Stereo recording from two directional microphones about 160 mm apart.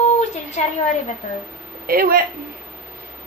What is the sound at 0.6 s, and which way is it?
Speech, 50° left (ahead or behind).